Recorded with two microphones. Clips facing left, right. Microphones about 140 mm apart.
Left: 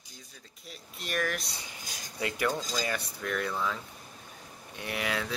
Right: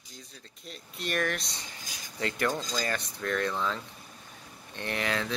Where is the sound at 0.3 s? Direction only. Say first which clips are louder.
Right 2 dB; 5° left (ahead or behind).